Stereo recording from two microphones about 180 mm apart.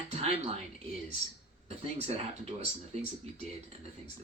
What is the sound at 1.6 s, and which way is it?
Speech, 35° right (ahead or behind).